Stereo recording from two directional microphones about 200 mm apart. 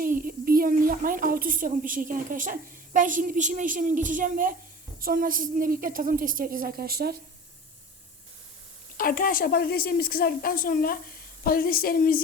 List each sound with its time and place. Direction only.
0.0 s a woman's voice: 45° right (ahead or behind)
9.0 s a woman's voice: 45° left (ahead or behind)